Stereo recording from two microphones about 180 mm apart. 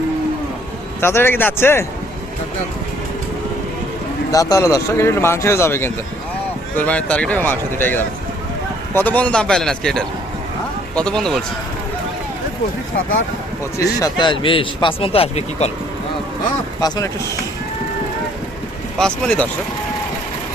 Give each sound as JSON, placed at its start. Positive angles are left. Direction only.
{"t": 1.0, "sound": "speech", "side_deg": 10}
{"t": 4.3, "sound": "a man's voice", "side_deg": 20}
{"t": 13.7, "sound": "speech", "side_deg": 20}
{"t": 16.8, "sound": "speech", "side_deg": 20}
{"t": 18.9, "sound": "a man's voice", "side_deg": 5}